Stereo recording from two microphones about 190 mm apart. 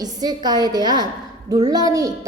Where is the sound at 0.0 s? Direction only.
20° right (ahead or behind).